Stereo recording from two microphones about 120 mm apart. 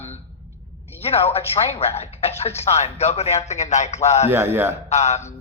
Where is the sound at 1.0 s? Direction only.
55° left (ahead or behind).